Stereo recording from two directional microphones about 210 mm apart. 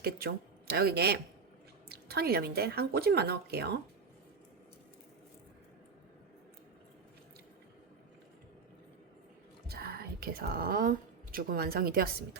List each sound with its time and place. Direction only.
0.0 s speech: 45° right (ahead or behind)
9.6 s speech: 50° right (ahead or behind)